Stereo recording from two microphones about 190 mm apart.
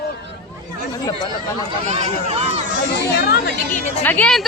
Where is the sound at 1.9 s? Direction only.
35° right (ahead or behind).